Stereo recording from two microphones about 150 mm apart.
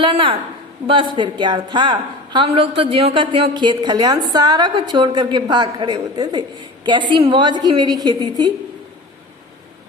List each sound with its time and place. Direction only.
0.0 s a woman's voice: 35° right (ahead or behind)